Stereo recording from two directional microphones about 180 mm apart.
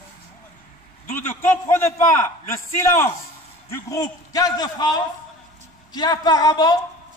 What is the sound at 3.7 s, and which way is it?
A man's voice, 20° left (ahead or behind).